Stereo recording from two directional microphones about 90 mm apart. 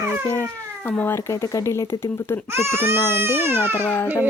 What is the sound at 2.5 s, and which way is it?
Speech, 25° right (ahead or behind).